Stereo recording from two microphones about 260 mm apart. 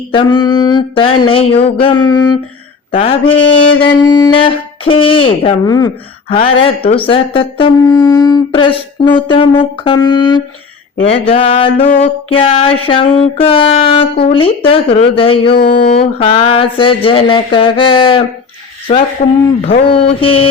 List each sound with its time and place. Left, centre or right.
0.1 s mantra: centre
2.9 s speech: left